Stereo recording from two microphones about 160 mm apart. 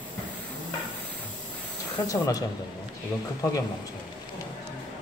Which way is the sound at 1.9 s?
25° left (ahead or behind).